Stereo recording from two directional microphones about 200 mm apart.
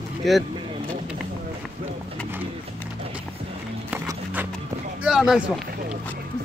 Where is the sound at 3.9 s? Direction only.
10° right (ahead or behind).